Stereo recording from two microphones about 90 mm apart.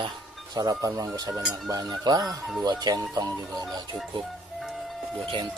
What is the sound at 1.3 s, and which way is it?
Speech, centre (ahead or behind).